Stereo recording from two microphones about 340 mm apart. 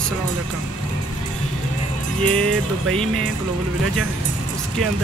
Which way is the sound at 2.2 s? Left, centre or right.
Centre.